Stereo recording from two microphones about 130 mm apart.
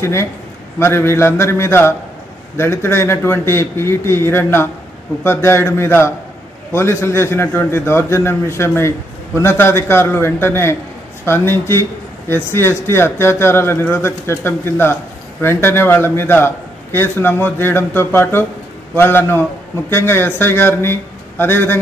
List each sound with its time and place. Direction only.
0.0 s a man's voice: 20° left (ahead or behind)